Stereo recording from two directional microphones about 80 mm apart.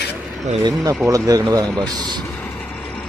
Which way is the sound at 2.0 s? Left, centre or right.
Right.